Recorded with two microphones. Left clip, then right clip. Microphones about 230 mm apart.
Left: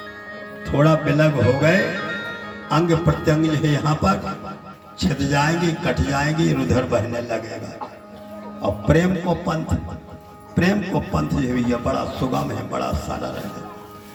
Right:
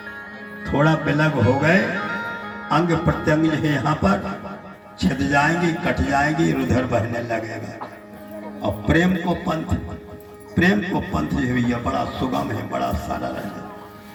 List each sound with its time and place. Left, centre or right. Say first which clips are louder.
0.6 s a man's voice: left 1 dB; left